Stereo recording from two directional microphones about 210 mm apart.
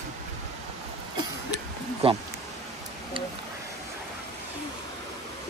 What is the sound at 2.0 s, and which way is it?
Speech, 30° right (ahead or behind).